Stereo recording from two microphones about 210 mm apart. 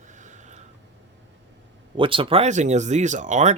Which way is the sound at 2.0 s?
25° right (ahead or behind).